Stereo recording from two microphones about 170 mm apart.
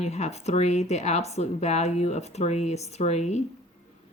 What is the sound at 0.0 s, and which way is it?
Speech, 40° left (ahead or behind).